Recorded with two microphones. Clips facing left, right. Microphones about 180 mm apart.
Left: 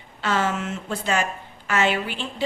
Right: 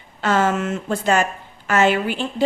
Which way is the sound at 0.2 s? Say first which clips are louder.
Right 5 dB; 45° right (ahead or behind).